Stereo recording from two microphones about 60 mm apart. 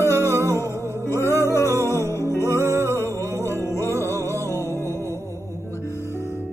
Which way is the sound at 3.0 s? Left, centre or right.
Left.